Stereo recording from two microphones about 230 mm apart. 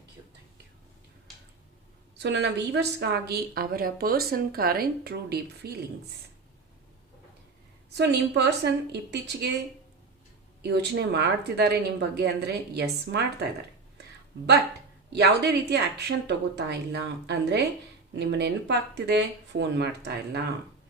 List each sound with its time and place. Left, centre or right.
2.1 s a woman's voice: right
7.9 s speech: right
15.1 s speech: right